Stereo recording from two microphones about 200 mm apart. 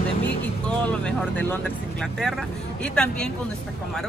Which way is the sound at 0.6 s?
5° left (ahead or behind).